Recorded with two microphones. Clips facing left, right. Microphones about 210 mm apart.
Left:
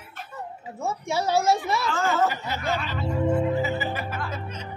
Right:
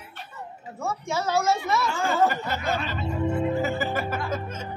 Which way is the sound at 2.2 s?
50° right (ahead or behind).